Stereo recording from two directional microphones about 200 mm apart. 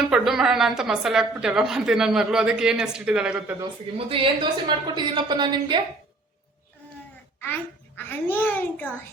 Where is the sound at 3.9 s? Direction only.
25° right (ahead or behind).